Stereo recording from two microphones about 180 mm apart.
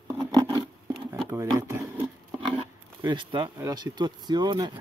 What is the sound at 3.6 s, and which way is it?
Speech, 20° right (ahead or behind).